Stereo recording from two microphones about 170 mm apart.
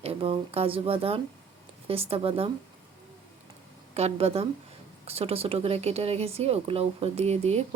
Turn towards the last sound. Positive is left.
turn(degrees=-40)  # may be behind; listen again after turning